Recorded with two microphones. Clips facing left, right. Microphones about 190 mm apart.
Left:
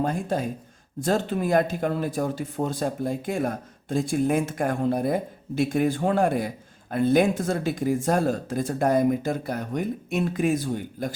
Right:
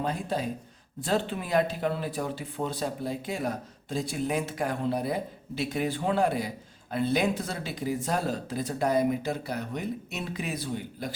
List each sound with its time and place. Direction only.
0.0 s speech: 50° left (ahead or behind)